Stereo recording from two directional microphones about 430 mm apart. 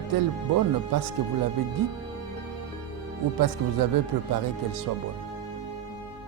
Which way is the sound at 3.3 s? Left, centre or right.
Right.